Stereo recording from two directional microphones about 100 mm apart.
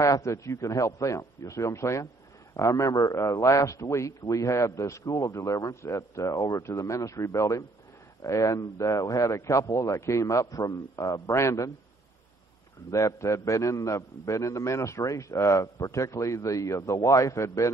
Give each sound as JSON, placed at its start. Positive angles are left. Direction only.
{"t": 0.0, "sound": "a man's voice", "side_deg": 30}
{"t": 12.9, "sound": "a man's voice", "side_deg": 30}